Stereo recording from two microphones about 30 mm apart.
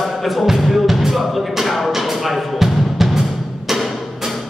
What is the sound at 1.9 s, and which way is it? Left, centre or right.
Music, centre.